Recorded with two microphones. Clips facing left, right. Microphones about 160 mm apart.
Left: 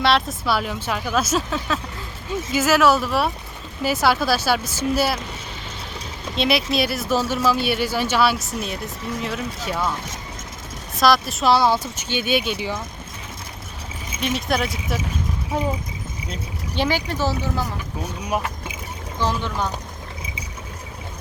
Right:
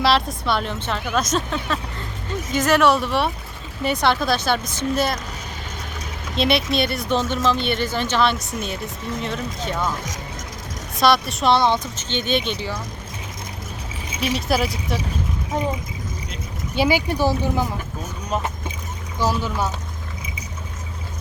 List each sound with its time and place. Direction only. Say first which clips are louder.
0.0 s speech: even; centre (ahead or behind)
6.3 s speech: right 1 dB; centre (ahead or behind)
11.0 s speech: even; centre (ahead or behind)
14.2 s speech: right 1 dB; centre (ahead or behind)
16.7 s speech: right 3 dB; 10° right (ahead or behind)
19.2 s speech: right 2 dB; 5° right (ahead or behind)